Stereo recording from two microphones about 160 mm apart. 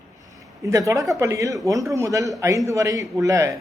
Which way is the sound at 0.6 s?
20° right (ahead or behind).